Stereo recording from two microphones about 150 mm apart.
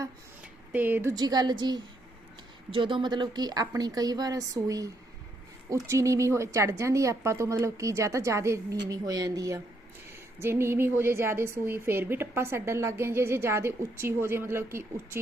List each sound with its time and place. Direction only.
0.7 s a woman's voice: 10° right (ahead or behind)
1.1 s a woman's voice: 30° right (ahead or behind)